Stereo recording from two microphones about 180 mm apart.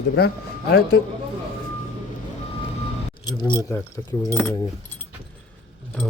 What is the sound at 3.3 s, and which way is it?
Speech, 25° left (ahead or behind).